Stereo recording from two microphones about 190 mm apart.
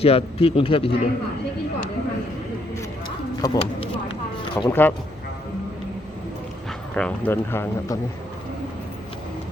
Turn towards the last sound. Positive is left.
turn(degrees=10)  # may be behind; listen again after turning